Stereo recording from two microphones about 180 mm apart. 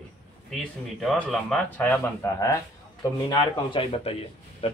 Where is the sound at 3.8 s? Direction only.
35° left (ahead or behind).